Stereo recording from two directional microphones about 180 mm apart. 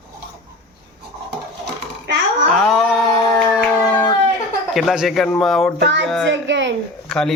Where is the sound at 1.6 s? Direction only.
75° right (ahead or behind).